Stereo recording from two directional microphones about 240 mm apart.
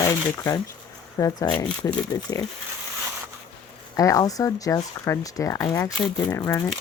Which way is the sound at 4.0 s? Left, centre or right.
Centre.